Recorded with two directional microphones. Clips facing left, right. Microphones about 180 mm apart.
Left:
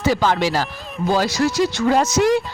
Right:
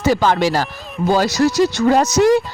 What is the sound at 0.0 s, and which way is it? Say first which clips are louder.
Speech: right 3 dB; 50° right (ahead or behind).